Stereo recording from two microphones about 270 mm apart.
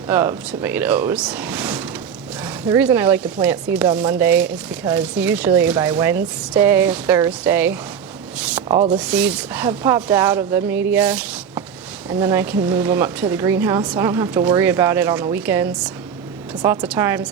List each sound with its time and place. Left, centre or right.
0.1 s a woman's voice: centre
8.4 s a sound: centre
8.6 s rub: centre
9.0 s a woman's voice: centre